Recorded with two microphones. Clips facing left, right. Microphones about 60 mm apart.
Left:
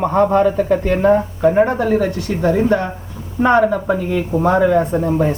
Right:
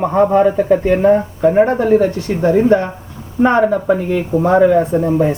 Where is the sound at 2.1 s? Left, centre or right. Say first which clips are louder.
Right 3 dB; right.